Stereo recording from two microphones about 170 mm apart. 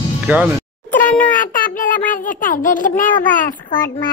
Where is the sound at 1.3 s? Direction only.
50° left (ahead or behind).